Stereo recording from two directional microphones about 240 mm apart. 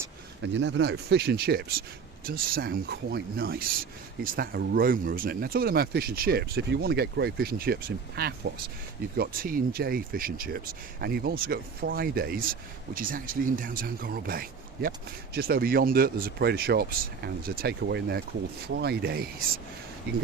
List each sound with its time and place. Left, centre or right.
0.4 s speech: right